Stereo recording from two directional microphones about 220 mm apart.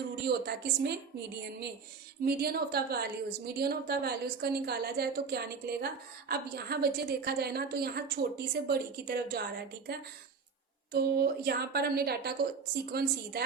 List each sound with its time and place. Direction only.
0.3 s a woman's voice: 45° right (ahead or behind)
2.2 s a woman's voice: 45° right (ahead or behind)
10.9 s a woman's voice: 45° right (ahead or behind)